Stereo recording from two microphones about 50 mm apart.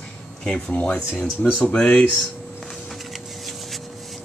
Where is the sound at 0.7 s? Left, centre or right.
Left.